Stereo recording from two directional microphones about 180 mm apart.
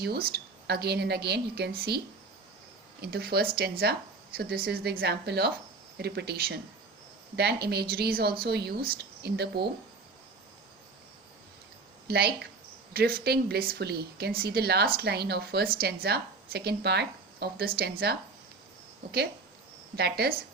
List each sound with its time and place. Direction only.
0.0 s speech: 60° right (ahead or behind)
3.0 s speech: 60° right (ahead or behind)
12.0 s speech: 60° right (ahead or behind)
20.0 s speech: 60° right (ahead or behind)